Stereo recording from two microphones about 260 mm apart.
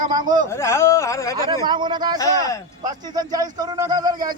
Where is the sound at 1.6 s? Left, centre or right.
Centre.